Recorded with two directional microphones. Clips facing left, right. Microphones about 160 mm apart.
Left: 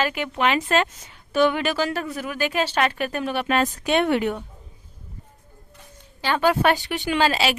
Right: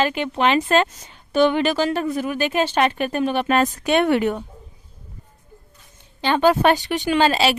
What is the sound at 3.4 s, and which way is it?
Speech, 40° right (ahead or behind).